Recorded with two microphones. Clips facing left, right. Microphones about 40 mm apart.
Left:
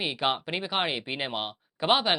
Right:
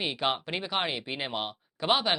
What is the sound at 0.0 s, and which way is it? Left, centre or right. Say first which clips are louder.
Speech: left 1 dB; centre.